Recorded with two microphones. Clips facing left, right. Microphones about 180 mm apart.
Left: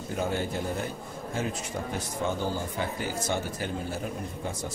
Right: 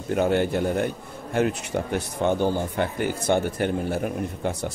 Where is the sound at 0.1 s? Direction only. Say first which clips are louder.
Right 9 dB; 65° right (ahead or behind).